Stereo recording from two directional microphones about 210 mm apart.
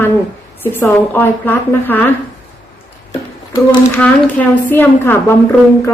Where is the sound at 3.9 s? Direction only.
10° left (ahead or behind).